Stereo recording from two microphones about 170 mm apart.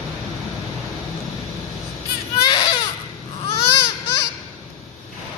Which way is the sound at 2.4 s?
25° left (ahead or behind).